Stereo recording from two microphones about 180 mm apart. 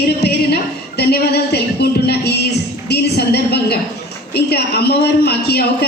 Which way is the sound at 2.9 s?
65° left (ahead or behind).